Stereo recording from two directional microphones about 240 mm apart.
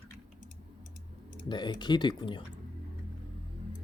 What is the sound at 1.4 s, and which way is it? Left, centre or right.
Speech, centre.